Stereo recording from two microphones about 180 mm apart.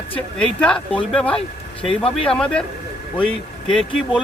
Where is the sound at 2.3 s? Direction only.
5° left (ahead or behind).